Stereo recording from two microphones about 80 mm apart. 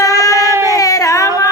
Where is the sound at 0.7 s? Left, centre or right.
Left.